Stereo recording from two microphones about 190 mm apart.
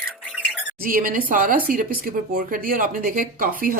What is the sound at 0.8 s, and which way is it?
Speech, 45° right (ahead or behind).